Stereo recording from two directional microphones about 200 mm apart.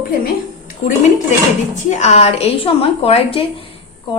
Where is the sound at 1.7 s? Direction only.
35° left (ahead or behind).